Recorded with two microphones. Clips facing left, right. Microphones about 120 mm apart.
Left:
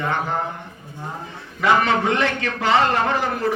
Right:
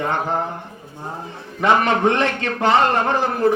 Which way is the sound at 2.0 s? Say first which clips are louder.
Right 3 dB; 30° right (ahead or behind).